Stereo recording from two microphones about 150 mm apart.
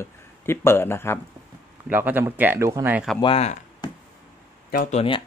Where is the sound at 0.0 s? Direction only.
15° left (ahead or behind).